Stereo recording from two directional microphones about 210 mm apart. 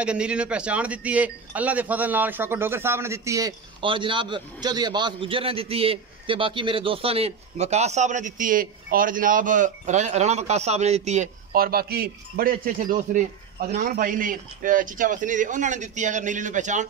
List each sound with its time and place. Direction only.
0.0 s speech: 5° right (ahead or behind); by 16.8 s 35° right (ahead or behind)